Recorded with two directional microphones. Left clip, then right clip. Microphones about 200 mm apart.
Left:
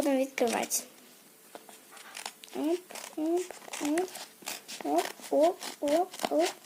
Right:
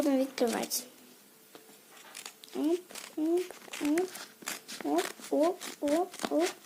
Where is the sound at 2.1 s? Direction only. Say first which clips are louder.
Left 2 dB; 5° right (ahead or behind).